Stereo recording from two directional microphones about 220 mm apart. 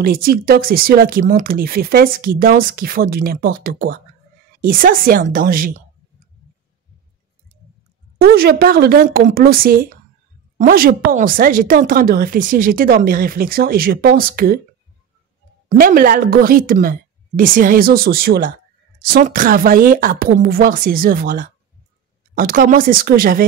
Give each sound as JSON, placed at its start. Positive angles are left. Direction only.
{"t": 0.0, "sound": "speech", "side_deg": -40}
{"t": 8.2, "sound": "a woman's voice", "side_deg": -45}
{"t": 15.7, "sound": "speech", "side_deg": -40}